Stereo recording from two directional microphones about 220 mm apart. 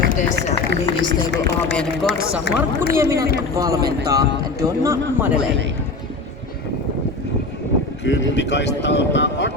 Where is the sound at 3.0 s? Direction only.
15° right (ahead or behind).